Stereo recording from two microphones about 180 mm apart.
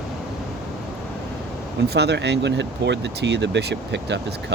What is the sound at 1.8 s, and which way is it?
Speech, 65° right (ahead or behind).